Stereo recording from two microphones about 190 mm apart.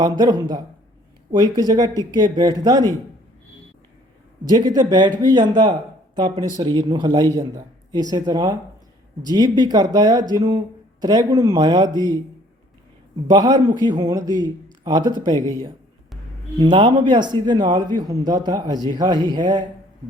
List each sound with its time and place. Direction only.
0.0 s a man's voice: 20° right (ahead or behind)
4.5 s a man's voice: 20° right (ahead or behind)
13.3 s a man's voice: 20° right (ahead or behind)
16.6 s a man's voice: 25° right (ahead or behind)